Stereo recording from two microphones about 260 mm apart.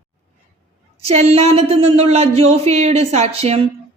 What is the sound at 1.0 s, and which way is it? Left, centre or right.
A man's voice, right.